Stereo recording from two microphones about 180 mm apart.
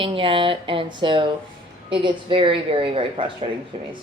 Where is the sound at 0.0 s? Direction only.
30° right (ahead or behind).